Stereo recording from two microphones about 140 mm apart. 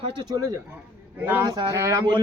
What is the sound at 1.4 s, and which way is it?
Speech, 25° right (ahead or behind).